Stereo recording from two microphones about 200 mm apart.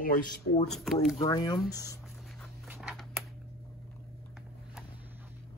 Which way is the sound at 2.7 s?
5° right (ahead or behind).